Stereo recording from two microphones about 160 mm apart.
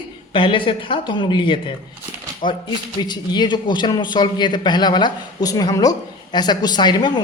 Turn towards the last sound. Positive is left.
turn(degrees=25)  # may be behind; listen again after turning